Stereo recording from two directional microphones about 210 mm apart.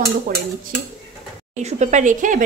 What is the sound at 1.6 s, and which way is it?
Speech, 35° right (ahead or behind).